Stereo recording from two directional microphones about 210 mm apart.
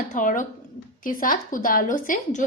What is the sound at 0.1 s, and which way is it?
A woman's voice, 40° left (ahead or behind).